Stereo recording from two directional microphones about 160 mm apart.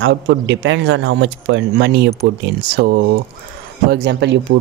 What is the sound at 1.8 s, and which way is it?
Speech, 90° right.